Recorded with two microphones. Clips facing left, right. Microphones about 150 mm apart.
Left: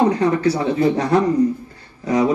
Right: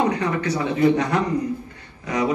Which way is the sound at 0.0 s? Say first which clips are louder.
Left 6 dB; 35° left (ahead or behind).